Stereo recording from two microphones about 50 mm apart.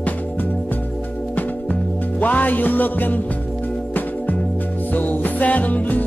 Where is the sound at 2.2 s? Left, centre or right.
Left.